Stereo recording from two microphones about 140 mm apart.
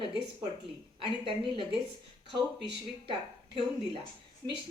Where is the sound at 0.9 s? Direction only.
40° right (ahead or behind).